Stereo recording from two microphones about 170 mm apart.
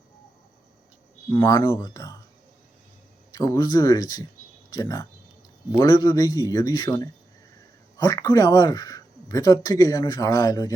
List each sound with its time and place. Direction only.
1.3 s speech: 20° left (ahead or behind)
3.3 s speech: 20° left (ahead or behind)